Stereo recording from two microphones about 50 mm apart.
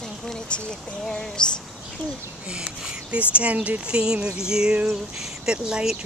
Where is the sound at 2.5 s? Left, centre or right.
Centre.